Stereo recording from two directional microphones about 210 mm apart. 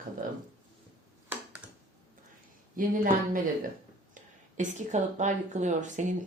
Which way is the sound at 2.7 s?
40° right (ahead or behind).